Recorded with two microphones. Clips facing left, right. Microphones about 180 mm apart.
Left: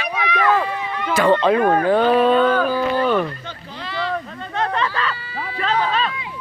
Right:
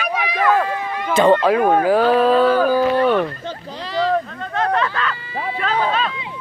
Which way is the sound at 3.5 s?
35° right (ahead or behind).